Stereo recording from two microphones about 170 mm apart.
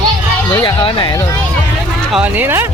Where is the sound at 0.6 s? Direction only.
25° left (ahead or behind).